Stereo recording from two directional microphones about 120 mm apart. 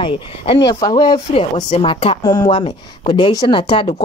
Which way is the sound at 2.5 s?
55° left (ahead or behind).